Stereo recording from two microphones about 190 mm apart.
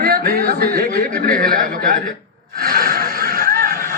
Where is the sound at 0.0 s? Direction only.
55° right (ahead or behind).